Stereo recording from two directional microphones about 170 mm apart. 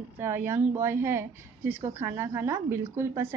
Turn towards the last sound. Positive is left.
turn(degrees=-15)  # may be behind; listen again after turning